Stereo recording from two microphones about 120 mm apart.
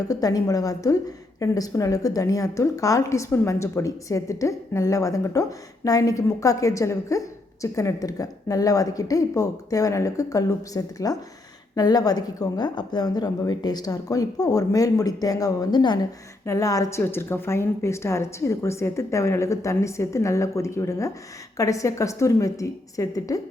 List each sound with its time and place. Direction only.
0.1 s a woman's voice: 30° left (ahead or behind)
16.5 s a woman's voice: 25° left (ahead or behind)